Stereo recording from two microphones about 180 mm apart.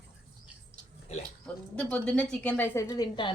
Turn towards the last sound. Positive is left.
turn(degrees=25)  # may be behind; listen again after turning